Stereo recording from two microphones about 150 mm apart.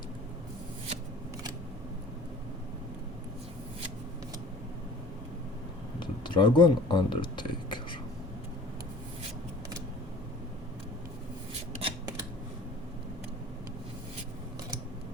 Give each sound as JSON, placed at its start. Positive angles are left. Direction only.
{"t": 6.0, "sound": "speech", "side_deg": 30}
{"t": 11.8, "sound": "scissors", "side_deg": -30}